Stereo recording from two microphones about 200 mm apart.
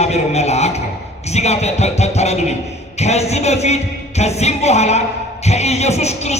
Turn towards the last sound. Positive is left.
turn(degrees=35)  # may be behind; listen again after turning